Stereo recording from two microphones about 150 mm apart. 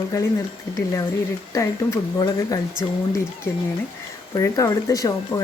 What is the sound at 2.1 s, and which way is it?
Speech, 25° left (ahead or behind).